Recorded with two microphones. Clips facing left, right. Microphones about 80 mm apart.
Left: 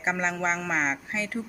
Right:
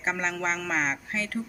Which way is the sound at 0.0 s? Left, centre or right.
Centre.